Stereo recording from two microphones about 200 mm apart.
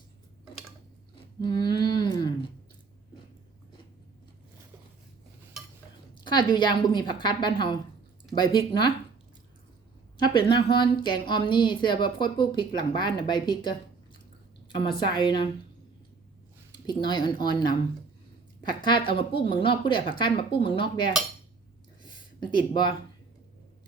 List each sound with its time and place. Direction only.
1.1 s a sound: 20° left (ahead or behind)
6.2 s a woman's voice: 20° left (ahead or behind)
10.2 s a woman's voice: 25° left (ahead or behind)
14.8 s a woman's voice: 25° left (ahead or behind)
16.7 s a woman's voice: 20° left (ahead or behind)
18.8 s a woman's voice: 25° left (ahead or behind)